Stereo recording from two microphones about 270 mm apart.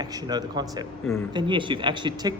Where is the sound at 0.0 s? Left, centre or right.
Centre.